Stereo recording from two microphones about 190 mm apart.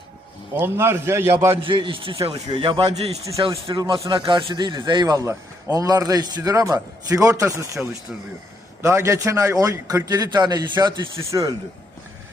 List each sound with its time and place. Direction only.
0.5 s a man's voice: 10° right (ahead or behind)
1.6 s speech: 25° right (ahead or behind)
3.2 s a man's voice: 15° right (ahead or behind)